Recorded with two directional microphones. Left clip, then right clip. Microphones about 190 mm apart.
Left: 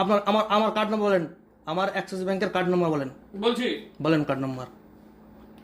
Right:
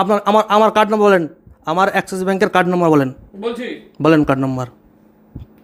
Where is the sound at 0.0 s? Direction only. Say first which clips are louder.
Right 9 dB; 45° right (ahead or behind).